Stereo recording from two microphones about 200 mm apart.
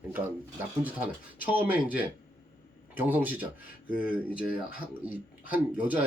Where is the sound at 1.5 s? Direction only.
10° right (ahead or behind).